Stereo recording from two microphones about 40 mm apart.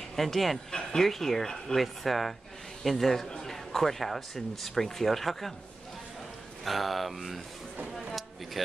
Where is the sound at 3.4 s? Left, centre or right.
Centre.